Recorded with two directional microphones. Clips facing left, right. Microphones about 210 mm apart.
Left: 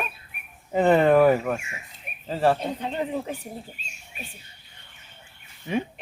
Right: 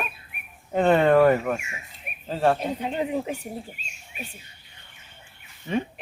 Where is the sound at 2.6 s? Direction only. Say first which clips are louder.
Right 1 dB; 10° right (ahead or behind).